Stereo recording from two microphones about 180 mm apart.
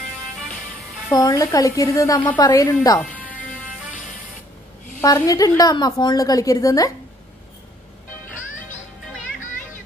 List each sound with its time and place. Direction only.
1.1 s a woman's voice: 20° left (ahead or behind)
5.0 s a woman's voice: 20° left (ahead or behind)